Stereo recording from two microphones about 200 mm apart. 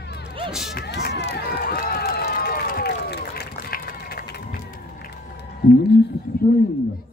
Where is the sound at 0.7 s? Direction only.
55° left (ahead or behind).